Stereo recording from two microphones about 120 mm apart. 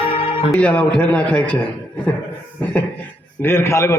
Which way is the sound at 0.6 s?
10° left (ahead or behind).